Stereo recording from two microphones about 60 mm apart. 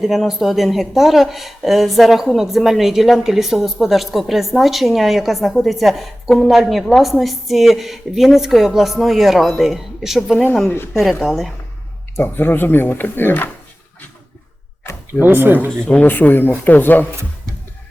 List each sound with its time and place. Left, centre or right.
0.0 s speech: centre
10.7 s speech: left
11.2 s speech: centre
12.1 s speech: left
15.2 s speech: right
15.8 s speech: left